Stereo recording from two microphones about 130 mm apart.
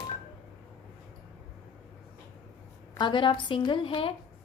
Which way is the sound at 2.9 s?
35° left (ahead or behind).